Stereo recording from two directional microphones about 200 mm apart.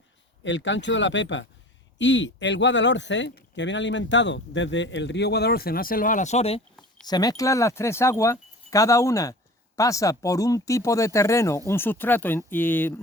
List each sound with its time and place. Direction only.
0.4 s speech: 65° left (ahead or behind); by 6.6 s 30° left (ahead or behind)
7.1 s speech: 20° left (ahead or behind)